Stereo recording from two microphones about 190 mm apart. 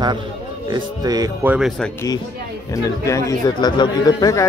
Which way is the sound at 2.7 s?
15° left (ahead or behind).